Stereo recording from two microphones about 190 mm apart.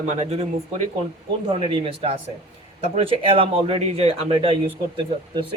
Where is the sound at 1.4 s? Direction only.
25° right (ahead or behind).